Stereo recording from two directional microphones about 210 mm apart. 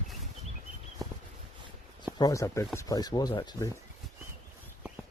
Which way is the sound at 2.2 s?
15° left (ahead or behind).